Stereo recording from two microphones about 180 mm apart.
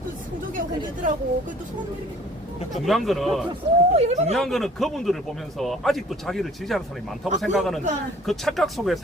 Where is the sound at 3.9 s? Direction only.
35° right (ahead or behind).